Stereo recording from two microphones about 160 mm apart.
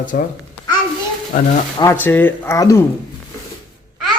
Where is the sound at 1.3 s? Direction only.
50° left (ahead or behind).